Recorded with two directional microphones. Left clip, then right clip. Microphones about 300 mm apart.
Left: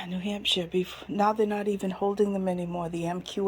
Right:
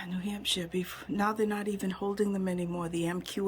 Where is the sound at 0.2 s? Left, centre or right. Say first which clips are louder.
Left 6 dB; centre.